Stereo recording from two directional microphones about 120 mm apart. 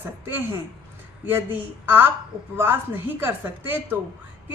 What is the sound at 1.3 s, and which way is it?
Speech, 15° right (ahead or behind).